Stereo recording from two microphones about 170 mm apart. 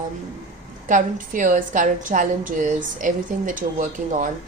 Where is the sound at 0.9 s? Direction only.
50° right (ahead or behind).